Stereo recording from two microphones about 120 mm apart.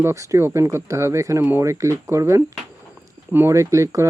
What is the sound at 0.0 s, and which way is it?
Speech, 25° right (ahead or behind).